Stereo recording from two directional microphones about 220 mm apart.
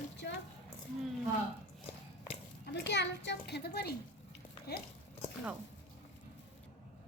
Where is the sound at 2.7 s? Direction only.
50° left (ahead or behind).